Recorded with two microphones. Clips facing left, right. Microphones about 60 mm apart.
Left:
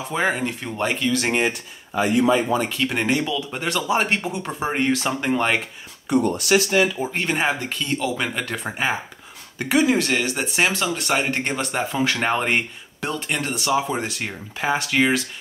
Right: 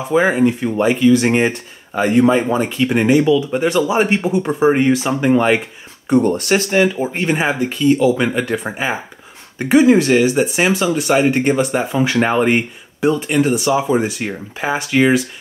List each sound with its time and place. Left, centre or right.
0.1 s speech: centre
2.0 s speech: right
2.3 s speech: right
6.0 s speech: right
7.0 s speech: centre
9.6 s speech: right; by 15.2 s centre